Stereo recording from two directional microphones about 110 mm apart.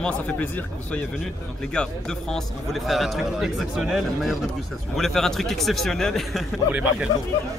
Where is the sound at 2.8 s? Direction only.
Centre (ahead or behind).